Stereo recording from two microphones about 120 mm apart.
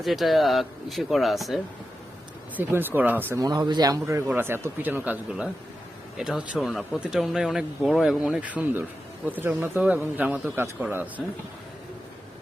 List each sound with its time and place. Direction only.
0.0 s speech: centre (ahead or behind)
2.6 s a man's voice: 15° right (ahead or behind)
3.3 s a man's voice: 30° right (ahead or behind)
11.2 s speech: centre (ahead or behind)